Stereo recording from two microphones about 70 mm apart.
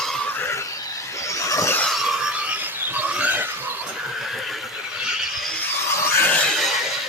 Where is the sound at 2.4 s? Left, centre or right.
Right.